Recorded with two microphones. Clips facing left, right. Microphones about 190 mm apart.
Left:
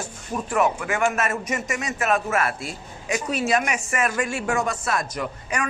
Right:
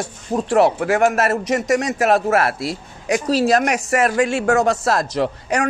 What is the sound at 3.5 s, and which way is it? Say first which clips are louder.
Speech: right 6 dB; 70° right (ahead or behind).